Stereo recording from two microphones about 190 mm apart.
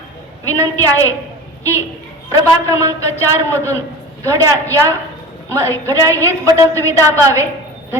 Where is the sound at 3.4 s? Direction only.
10° left (ahead or behind).